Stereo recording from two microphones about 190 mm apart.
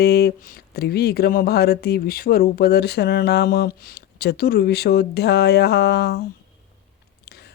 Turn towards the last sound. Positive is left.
turn(degrees=60)  # may be behind; listen again after turning